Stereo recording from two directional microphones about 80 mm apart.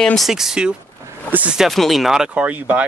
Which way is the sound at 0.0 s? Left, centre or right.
Centre.